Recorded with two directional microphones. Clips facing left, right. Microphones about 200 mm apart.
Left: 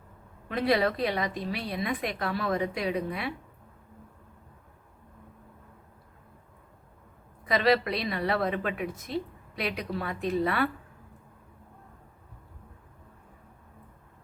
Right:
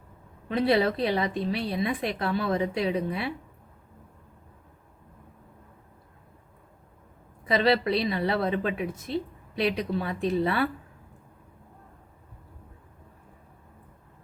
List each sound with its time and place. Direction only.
0.4 s a woman's voice: 30° right (ahead or behind)
7.4 s a woman's voice: 30° right (ahead or behind)